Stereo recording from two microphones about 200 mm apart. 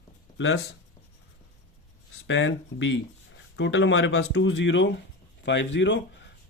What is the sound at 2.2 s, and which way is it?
Speech, 65° left (ahead or behind).